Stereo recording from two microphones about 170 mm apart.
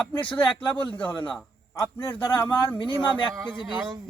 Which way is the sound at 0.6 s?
30° left (ahead or behind).